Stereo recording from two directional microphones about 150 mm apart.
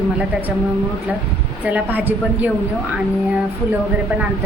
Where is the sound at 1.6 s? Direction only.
10° right (ahead or behind).